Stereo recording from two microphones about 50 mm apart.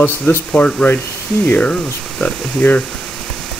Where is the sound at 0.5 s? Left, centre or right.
Left.